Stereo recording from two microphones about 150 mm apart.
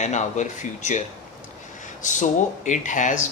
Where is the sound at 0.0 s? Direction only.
50° left (ahead or behind).